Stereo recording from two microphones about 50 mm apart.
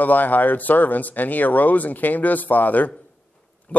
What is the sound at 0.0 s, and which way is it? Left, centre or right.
Speech, left.